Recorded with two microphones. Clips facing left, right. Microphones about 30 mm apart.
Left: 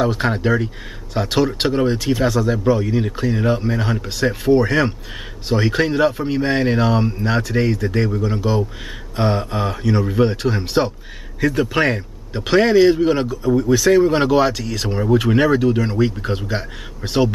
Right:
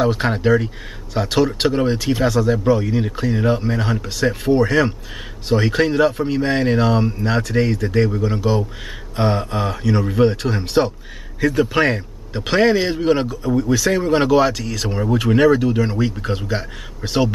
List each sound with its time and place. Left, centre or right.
0.0 s a man's voice: centre